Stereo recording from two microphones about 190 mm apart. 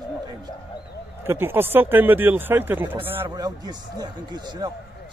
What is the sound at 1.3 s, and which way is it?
Speech, 10° right (ahead or behind).